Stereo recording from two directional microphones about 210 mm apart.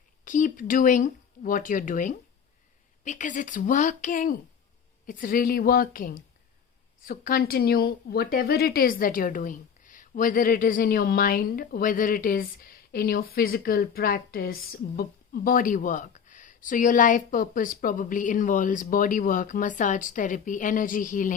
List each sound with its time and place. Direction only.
0.3 s a woman's voice: 40° left (ahead or behind)